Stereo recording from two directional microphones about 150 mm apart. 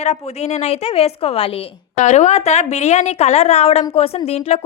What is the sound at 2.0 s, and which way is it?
A woman's voice, 50° left (ahead or behind).